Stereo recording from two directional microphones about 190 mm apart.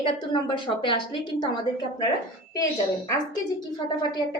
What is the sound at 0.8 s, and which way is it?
Speech, 25° left (ahead or behind).